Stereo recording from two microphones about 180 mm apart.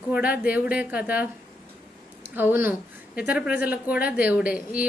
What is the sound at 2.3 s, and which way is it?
Speech, 10° right (ahead or behind).